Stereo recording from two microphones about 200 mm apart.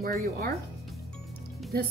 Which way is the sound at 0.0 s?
50° right (ahead or behind).